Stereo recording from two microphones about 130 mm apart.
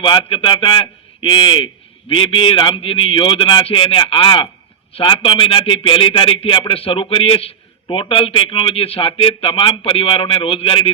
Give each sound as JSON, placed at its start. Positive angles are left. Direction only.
{"t": 0.0, "sound": "speech", "side_deg": 40}